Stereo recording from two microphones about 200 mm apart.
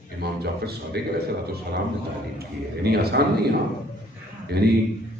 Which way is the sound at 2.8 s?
50° right (ahead or behind).